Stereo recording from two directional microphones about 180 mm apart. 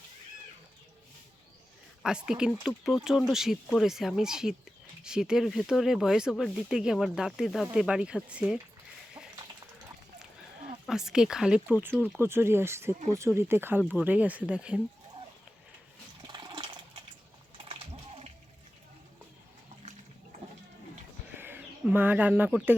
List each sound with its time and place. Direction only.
2.0 s speech: 5° right (ahead or behind)
10.8 s speech: 5° right (ahead or behind)
16.2 s water: 25° right (ahead or behind)
21.3 s bird: 10° right (ahead or behind)